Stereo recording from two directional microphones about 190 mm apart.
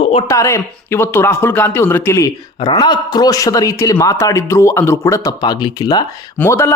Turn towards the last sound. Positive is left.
turn(degrees=15)  # may be behind; listen again after turning